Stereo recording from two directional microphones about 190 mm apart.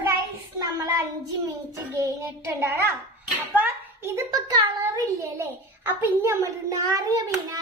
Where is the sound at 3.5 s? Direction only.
10° right (ahead or behind).